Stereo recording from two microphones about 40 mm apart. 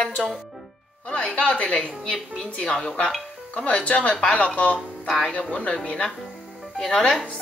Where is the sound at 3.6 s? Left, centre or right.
Left.